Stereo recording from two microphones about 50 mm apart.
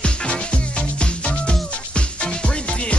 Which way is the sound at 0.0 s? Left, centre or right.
Left.